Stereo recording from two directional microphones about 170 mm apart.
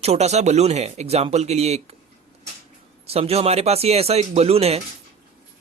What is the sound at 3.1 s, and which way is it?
Speech, 35° right (ahead or behind).